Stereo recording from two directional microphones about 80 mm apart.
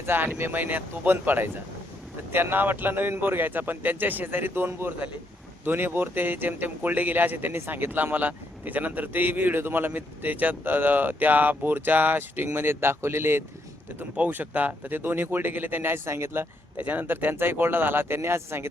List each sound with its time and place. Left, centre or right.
0.0 s speech: right